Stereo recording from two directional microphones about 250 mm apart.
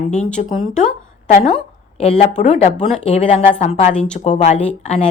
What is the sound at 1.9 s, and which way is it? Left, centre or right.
A woman's voice, left.